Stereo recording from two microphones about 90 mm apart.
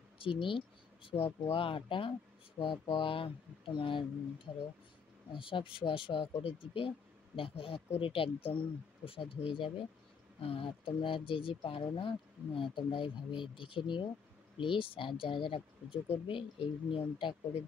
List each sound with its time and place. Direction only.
0.2 s speech: 80° left
2.6 s speech: 70° left (ahead or behind)
5.3 s speech: 70° left (ahead or behind)